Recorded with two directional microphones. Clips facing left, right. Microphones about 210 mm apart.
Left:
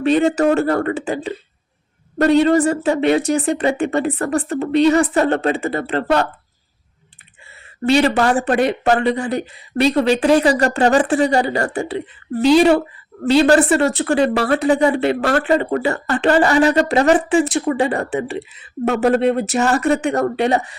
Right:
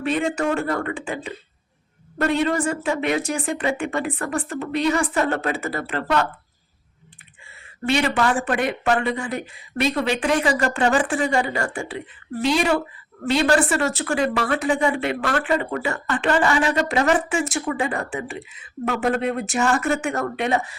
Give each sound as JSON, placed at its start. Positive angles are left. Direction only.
{"t": 0.0, "sound": "speech", "side_deg": 30}
{"t": 7.9, "sound": "speech", "side_deg": 35}